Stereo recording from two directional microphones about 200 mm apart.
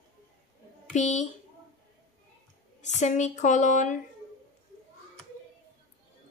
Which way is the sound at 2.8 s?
35° left (ahead or behind).